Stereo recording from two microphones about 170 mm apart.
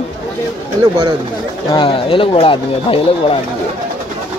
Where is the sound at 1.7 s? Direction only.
30° left (ahead or behind).